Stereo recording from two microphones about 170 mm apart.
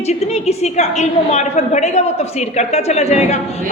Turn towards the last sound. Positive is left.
turn(degrees=40)  # may be behind; listen again after turning